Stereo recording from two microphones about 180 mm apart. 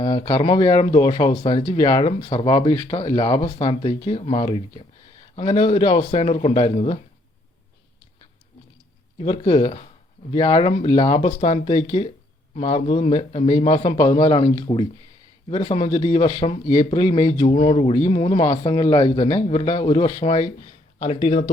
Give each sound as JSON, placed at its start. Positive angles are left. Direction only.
{"t": 0.0, "sound": "speech", "side_deg": 25}
{"t": 9.1, "sound": "speech", "side_deg": 30}